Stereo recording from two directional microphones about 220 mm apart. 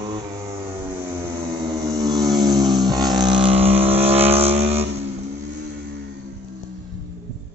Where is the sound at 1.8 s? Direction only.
15° right (ahead or behind).